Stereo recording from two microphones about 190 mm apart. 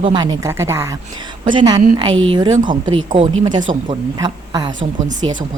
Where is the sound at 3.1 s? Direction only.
35° right (ahead or behind).